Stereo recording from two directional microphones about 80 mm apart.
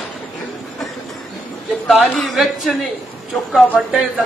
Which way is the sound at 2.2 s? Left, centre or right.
Centre.